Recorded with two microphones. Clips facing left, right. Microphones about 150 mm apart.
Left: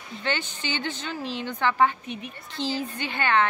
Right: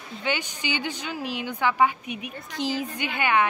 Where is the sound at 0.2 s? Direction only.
10° right (ahead or behind).